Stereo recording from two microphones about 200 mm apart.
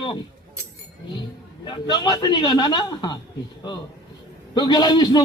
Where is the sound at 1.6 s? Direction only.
20° left (ahead or behind).